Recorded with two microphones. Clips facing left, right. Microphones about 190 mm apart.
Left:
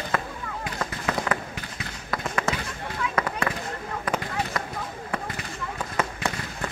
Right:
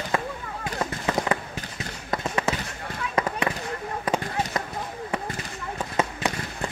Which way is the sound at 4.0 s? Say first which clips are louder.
Right 2 dB; 20° right (ahead or behind).